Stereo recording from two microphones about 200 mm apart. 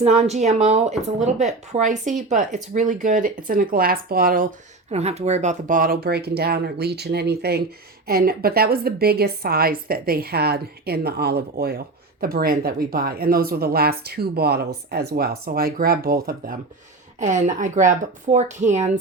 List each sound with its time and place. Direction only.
0.0 s speech: 35° right (ahead or behind)
4.9 s speech: 35° right (ahead or behind)